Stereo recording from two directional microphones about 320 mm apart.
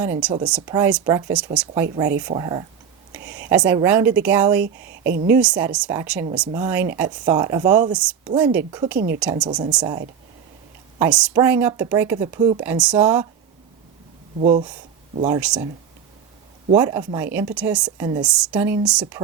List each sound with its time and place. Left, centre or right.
0.0 s a woman's voice: centre
4.6 s speech: right
5.3 s a woman's voice: centre
9.0 s speech: right
9.5 s speech: centre
11.0 s speech: centre
14.3 s speech: right
15.3 s a woman's voice: centre
16.7 s speech: centre